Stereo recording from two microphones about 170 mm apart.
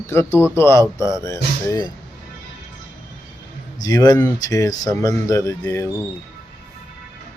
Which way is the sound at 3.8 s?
20° left (ahead or behind).